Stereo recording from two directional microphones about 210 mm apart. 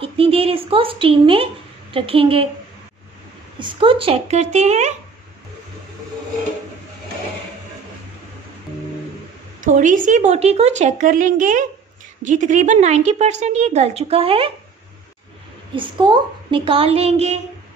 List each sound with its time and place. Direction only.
0.0 s speech: 25° right (ahead or behind)
3.5 s a woman's voice: 25° right (ahead or behind)
9.6 s a woman's voice: 40° right (ahead or behind)
15.7 s speech: 25° right (ahead or behind)